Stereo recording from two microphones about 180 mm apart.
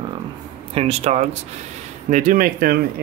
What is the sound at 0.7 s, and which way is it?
Speech, 35° right (ahead or behind).